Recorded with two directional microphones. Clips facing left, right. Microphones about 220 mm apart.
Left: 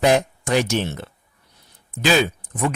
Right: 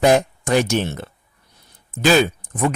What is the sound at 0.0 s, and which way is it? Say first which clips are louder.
Speech: right 2 dB; 50° right (ahead or behind).